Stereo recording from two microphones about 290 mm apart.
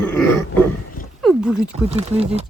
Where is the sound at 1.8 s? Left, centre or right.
Right.